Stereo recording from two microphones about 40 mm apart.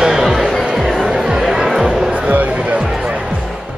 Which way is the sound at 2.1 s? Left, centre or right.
Right.